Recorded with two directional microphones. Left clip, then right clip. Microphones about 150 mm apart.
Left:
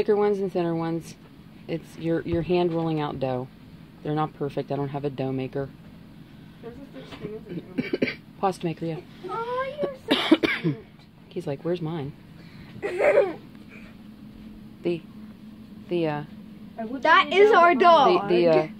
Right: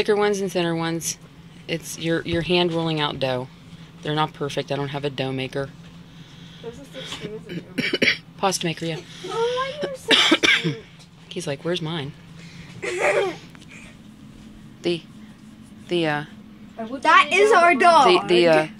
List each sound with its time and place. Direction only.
0.0 s speech: 10° left (ahead or behind)
7.0 s speech: 5° left (ahead or behind); by 10.8 s 25° left (ahead or behind)
11.3 s speech: 15° left (ahead or behind)
12.8 s laughter: 50° left (ahead or behind)
14.8 s speech: 5° left (ahead or behind)
18.0 s speech: 5° left (ahead or behind)